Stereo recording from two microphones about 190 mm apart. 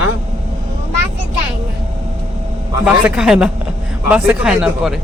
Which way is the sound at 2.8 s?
5° right (ahead or behind).